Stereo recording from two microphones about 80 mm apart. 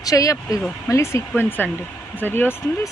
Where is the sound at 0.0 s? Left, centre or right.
Left.